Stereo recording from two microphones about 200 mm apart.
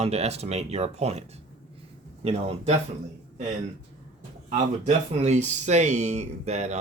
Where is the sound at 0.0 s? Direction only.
30° right (ahead or behind).